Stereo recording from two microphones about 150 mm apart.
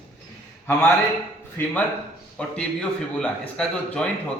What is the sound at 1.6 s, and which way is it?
A man's voice, 15° left (ahead or behind).